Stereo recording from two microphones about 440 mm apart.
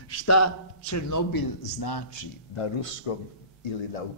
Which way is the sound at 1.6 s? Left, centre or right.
Left.